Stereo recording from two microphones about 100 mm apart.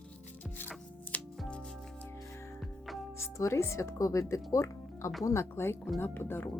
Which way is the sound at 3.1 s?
25° left (ahead or behind).